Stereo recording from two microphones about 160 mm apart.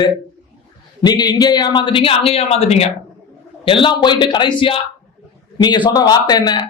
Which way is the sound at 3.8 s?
30° left (ahead or behind).